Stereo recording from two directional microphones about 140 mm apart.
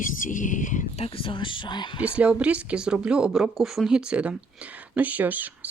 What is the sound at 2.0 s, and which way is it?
Speech, 10° right (ahead or behind).